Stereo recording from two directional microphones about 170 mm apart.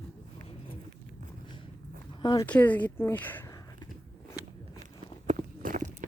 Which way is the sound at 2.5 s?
10° left (ahead or behind).